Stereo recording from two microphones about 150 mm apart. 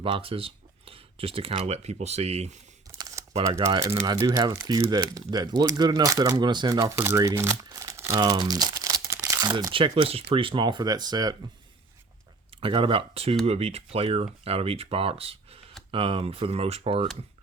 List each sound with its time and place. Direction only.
0.0 s speech: 40° right (ahead or behind)
3.8 s speech: 20° right (ahead or behind)
9.0 s crumpling: 20° right (ahead or behind)
9.5 s speech: 30° right (ahead or behind)
12.5 s speech: 35° right (ahead or behind)